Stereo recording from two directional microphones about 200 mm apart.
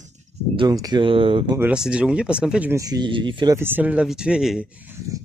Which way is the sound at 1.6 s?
5° right (ahead or behind).